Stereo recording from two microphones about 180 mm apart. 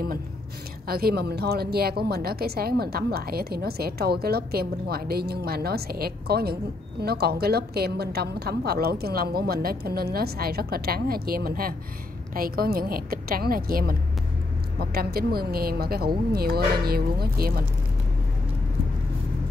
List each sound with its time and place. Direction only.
0.8 s a woman's voice: 60° right (ahead or behind)